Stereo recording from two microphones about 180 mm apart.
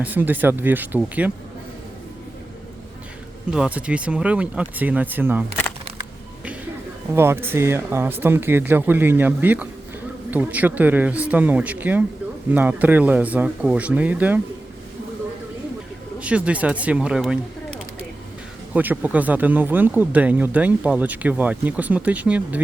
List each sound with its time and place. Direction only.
0.0 s speech: 10° right (ahead or behind)
3.5 s speech: 5° right (ahead or behind)
7.1 s speech: 15° right (ahead or behind)
16.2 s speech: 5° right (ahead or behind)
18.7 s speech: 10° right (ahead or behind)